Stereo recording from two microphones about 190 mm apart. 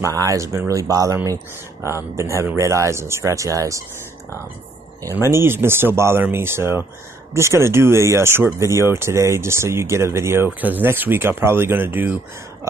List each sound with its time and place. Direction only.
0.0 s speech: 15° right (ahead or behind)
5.0 s speech: 15° right (ahead or behind)